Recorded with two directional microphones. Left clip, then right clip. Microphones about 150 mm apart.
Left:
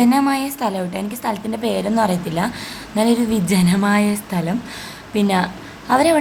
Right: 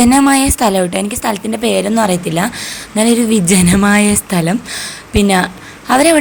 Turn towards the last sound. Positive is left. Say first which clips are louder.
# right 5 dB
turn(degrees=-15)  # may be behind; listen again after turning